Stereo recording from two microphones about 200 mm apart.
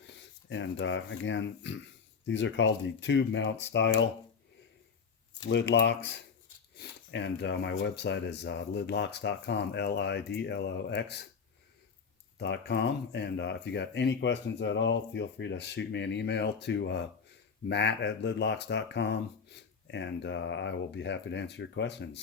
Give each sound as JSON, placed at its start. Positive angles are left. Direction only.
{"t": 0.5, "sound": "speech", "side_deg": 70}
{"t": 5.5, "sound": "speech", "side_deg": 60}
{"t": 12.4, "sound": "speech", "side_deg": 60}